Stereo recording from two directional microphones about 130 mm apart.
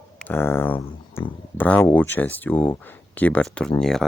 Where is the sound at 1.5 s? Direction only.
15° left (ahead or behind).